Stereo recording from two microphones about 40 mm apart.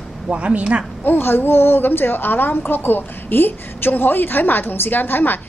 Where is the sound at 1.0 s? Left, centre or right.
Left.